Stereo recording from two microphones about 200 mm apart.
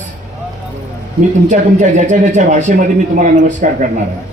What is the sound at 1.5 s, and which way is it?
Speech, 40° right (ahead or behind).